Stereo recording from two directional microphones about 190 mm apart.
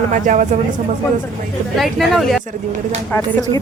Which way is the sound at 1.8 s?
Centre (ahead or behind).